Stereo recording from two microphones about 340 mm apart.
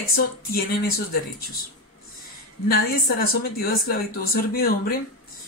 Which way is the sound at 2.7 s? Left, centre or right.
Left.